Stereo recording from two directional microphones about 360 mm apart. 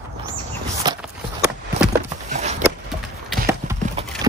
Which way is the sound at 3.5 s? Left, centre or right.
Centre.